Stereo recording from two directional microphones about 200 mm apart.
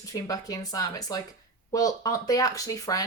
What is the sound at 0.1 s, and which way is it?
A woman's voice, 15° left (ahead or behind).